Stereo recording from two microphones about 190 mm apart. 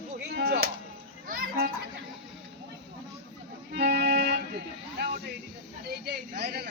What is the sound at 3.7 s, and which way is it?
Music, 55° right (ahead or behind).